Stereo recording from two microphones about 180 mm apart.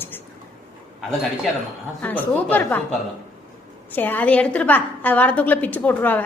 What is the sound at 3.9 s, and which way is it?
A woman's voice, 10° left (ahead or behind).